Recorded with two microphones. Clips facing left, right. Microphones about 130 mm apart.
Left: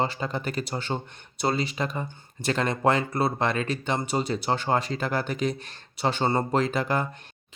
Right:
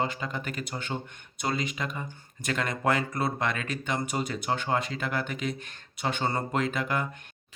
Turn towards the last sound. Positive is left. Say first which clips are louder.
# left 4 dB
turn(degrees=35)  # may be behind; listen again after turning